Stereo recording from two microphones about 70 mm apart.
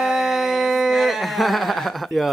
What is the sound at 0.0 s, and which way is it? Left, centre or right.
Howl, centre.